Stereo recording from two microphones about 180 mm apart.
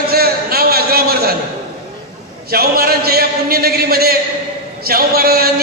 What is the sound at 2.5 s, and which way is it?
A man's voice, 55° right (ahead or behind).